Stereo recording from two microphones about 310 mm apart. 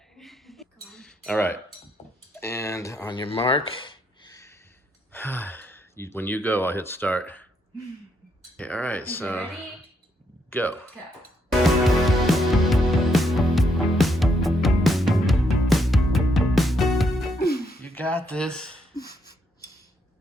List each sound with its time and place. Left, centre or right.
0.2 s a sound: centre
2.4 s speech: centre
8.5 s speech: centre
11.6 s music: centre
17.4 s music: left
17.8 s speech: centre